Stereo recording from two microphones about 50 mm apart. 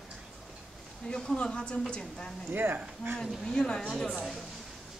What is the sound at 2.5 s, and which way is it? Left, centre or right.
Speech, right.